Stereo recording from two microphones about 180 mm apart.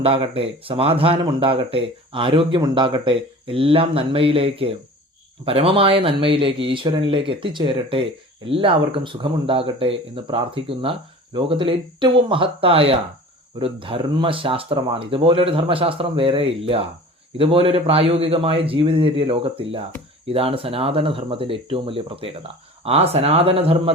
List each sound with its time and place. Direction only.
0.0 s speech: 30° right (ahead or behind)